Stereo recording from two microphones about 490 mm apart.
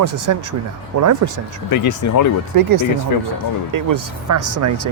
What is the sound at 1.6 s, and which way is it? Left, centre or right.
Speech, left.